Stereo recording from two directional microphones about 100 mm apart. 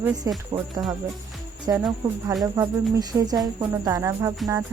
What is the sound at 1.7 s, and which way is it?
Speech, 30° right (ahead or behind).